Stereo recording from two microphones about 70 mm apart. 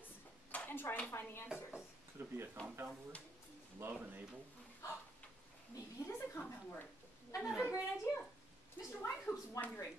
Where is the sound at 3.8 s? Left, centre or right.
Right.